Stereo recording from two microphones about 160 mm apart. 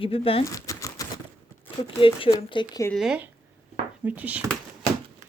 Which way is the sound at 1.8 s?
35° left (ahead or behind).